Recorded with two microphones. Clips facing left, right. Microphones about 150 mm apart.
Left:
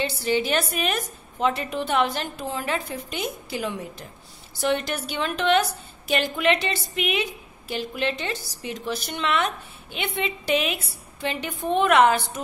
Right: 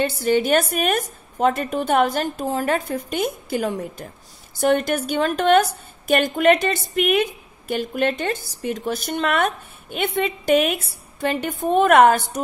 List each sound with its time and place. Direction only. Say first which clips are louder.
0.0 s a woman's voice: right 5 dB; 50° right (ahead or behind)